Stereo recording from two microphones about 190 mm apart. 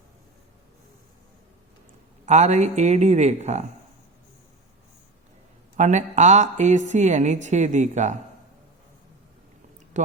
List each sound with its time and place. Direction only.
2.2 s a woman's voice: 35° right (ahead or behind)
5.7 s a woman's voice: 40° right (ahead or behind)